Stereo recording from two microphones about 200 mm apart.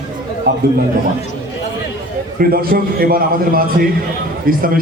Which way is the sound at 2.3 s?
50° right (ahead or behind).